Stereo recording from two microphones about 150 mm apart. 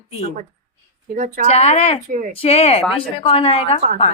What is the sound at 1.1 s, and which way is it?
Speech, 60° right (ahead or behind).